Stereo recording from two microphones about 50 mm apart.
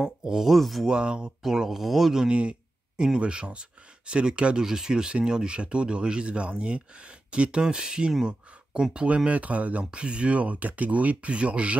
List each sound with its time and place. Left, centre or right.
0.0 s speech: centre
0.8 s speech: centre
2.2 s speech: right